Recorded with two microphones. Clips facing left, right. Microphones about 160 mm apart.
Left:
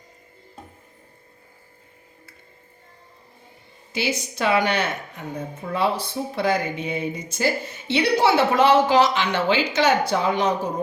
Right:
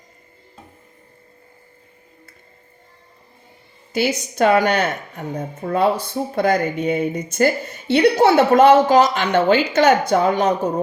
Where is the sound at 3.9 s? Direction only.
50° right (ahead or behind).